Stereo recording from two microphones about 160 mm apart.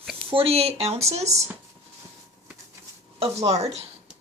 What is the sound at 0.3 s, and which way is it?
Speech, 35° right (ahead or behind).